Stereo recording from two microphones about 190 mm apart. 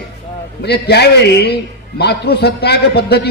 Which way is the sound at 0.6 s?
60° left (ahead or behind).